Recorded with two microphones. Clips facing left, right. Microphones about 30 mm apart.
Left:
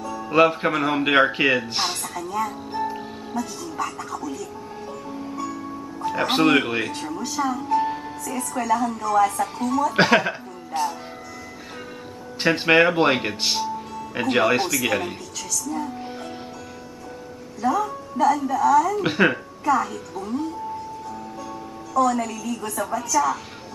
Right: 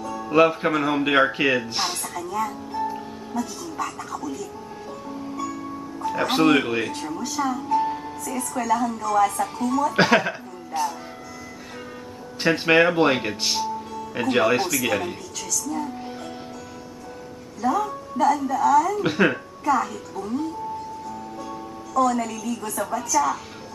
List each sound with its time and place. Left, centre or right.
0.0 s speech: centre
3.3 s a woman's voice: centre
5.4 s music: centre
7.1 s a woman's voice: centre
7.6 s music: centre
8.3 s a woman's voice: centre
10.7 s speech: left
12.4 s speech: centre
17.6 s a woman's voice: centre
19.0 s speech: centre
19.3 s a woman's voice: centre